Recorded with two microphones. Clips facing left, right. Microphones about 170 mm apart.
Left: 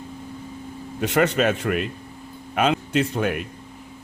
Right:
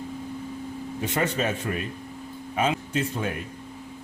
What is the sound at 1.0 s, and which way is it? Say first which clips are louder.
A man's voice: left 7 dB; 75° left (ahead or behind).